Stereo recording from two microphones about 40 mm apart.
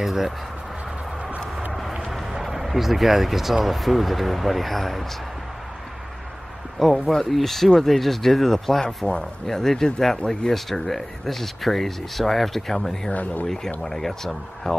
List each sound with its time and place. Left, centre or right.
0.0 s speech: centre
1.7 s vehicle: centre
2.0 s speech: centre
6.8 s speech: centre
8.8 s speech: left
9.5 s speech: centre
13.1 s speech: left
13.8 s speech: centre